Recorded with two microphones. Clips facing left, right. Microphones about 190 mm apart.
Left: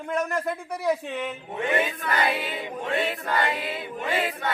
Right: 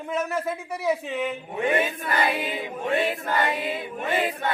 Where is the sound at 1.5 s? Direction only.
20° right (ahead or behind).